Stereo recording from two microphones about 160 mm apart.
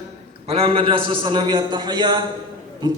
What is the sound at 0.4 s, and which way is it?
A man's voice, 40° right (ahead or behind).